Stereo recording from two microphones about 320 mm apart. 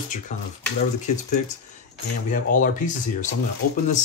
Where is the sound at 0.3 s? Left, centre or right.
Left.